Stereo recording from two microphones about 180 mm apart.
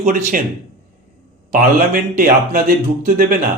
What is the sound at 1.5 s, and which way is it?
Speech, 50° right (ahead or behind).